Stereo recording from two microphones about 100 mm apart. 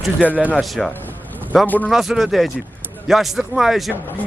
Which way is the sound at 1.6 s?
15° left (ahead or behind).